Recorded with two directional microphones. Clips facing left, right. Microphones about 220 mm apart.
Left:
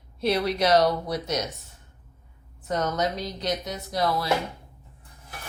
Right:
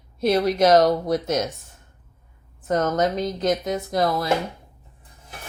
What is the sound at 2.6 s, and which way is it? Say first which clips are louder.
Speech: right 5 dB; 50° right (ahead or behind).